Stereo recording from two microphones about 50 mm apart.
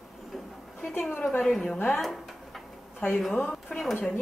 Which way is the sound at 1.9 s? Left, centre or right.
Centre.